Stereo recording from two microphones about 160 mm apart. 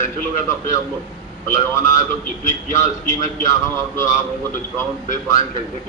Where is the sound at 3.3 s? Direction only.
20° left (ahead or behind).